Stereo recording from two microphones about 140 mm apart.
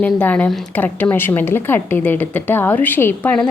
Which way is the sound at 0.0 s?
10° left (ahead or behind).